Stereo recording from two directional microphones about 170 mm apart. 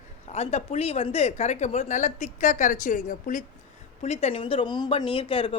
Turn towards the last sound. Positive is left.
turn(degrees=30)  # may be behind; listen again after turning